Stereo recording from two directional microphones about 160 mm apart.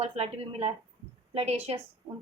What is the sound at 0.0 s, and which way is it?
A woman's voice, 40° right (ahead or behind).